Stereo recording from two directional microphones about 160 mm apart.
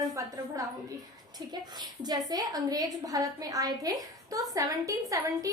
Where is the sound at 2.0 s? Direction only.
25° right (ahead or behind).